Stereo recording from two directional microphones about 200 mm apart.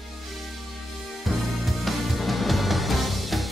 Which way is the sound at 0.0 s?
Centre (ahead or behind).